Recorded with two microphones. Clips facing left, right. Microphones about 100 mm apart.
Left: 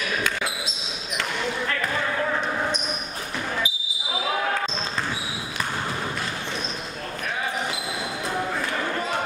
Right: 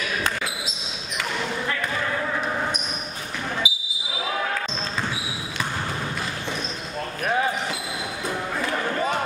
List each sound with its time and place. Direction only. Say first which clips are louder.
3.6 s basketball bounce: right 3 dB; 10° right (ahead or behind)